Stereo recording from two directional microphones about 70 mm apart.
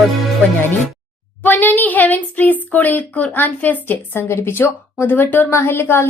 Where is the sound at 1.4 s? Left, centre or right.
Left.